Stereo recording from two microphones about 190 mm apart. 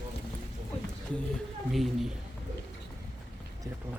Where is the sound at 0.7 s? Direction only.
35° left (ahead or behind).